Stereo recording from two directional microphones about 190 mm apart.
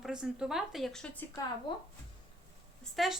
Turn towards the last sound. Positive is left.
turn(degrees=0)  # may be behind; listen again after turning